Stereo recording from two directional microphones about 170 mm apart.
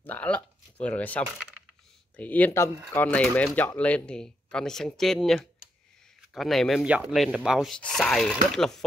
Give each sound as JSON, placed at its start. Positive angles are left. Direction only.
{"t": 0.0, "sound": "speech", "side_deg": 10}